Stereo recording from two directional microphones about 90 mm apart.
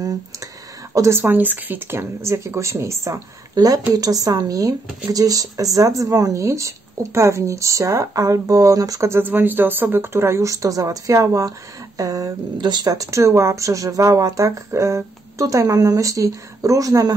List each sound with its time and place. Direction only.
0.0 s a sound: 40° right (ahead or behind)
0.9 s speech: 35° right (ahead or behind)
1.2 s speech: 20° right (ahead or behind); by 12.4 s 40° right (ahead or behind)
12.5 s speech: 55° right (ahead or behind); by 17.1 s 40° right (ahead or behind)